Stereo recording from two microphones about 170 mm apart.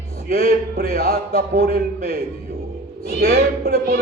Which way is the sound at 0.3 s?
70° right (ahead or behind).